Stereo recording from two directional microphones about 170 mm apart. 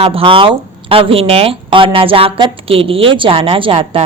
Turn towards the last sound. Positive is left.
turn(degrees=-30)  # may be behind; listen again after turning